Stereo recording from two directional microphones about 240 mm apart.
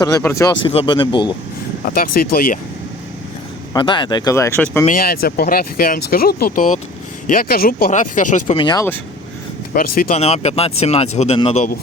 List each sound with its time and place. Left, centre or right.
0.0 s speech: centre
1.8 s speech: left
3.8 s speech: centre
4.9 s speech: left
8.5 s speech: centre
9.7 s speech: left